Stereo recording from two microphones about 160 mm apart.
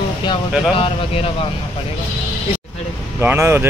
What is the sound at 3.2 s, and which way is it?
Speech, 15° right (ahead or behind).